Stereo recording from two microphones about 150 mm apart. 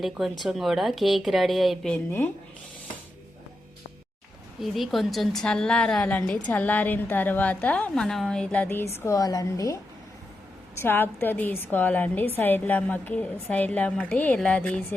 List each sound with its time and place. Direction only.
0.0 s a woman's voice: centre (ahead or behind)
4.6 s a woman's voice: centre (ahead or behind)
8.6 s a woman's voice: 15° left (ahead or behind)
10.8 s a woman's voice: 15° left (ahead or behind)